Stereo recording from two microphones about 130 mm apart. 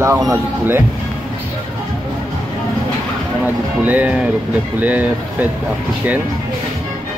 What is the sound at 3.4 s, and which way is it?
Speech, 10° right (ahead or behind).